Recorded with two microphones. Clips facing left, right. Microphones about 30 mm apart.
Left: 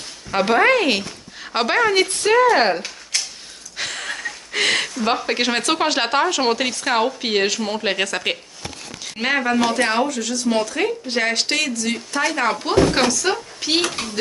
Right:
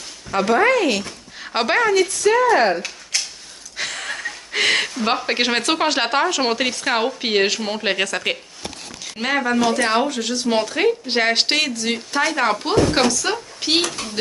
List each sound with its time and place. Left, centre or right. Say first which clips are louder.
0.3 s speech: left 1 dB; left
1.4 s speech: even; centre
2.0 s speech: right 1 dB; left
2.3 s speech: left 2 dB; left
2.7 s a sound: even; centre
3.7 s speech: even; centre
10.0 s speech: even; right
12.2 s a woman's voice: right 1 dB; centre
13.6 s speech: right 1 dB; centre